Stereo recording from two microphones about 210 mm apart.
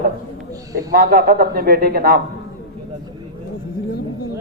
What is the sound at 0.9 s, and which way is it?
Speech, 45° right (ahead or behind).